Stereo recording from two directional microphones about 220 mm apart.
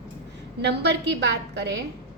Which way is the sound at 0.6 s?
50° right (ahead or behind).